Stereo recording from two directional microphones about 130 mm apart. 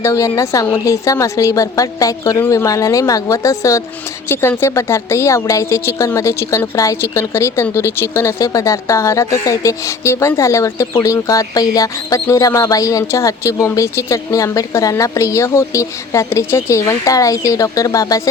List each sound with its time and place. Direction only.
0.0 s speech: 25° left (ahead or behind)